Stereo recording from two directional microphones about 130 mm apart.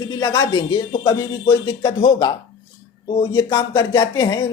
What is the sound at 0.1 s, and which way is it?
Speech, 35° left (ahead or behind).